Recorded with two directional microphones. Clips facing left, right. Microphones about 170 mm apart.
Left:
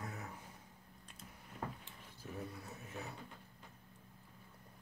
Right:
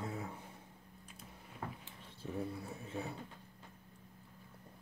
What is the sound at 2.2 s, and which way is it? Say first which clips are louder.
Speech: right 6 dB; 30° right (ahead or behind).